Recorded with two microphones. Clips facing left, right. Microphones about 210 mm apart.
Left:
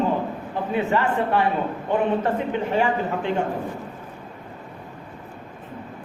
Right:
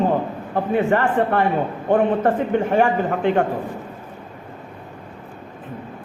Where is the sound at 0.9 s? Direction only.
50° right (ahead or behind).